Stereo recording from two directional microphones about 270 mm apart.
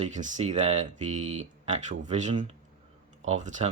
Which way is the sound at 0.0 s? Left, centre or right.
Right.